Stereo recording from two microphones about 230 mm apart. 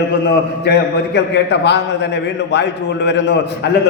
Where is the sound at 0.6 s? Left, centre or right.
Left.